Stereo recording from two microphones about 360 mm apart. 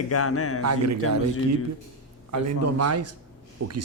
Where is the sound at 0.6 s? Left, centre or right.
Right.